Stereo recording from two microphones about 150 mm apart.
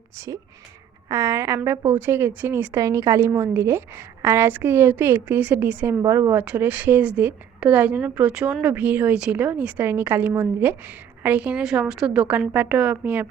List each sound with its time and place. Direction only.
0.2 s a woman's voice: 20° right (ahead or behind)